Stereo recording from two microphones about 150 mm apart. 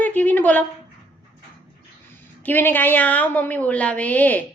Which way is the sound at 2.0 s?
15° left (ahead or behind).